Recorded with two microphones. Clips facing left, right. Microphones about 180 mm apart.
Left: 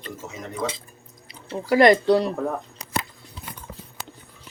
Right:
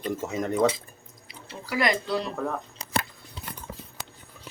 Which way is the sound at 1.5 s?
45° left (ahead or behind).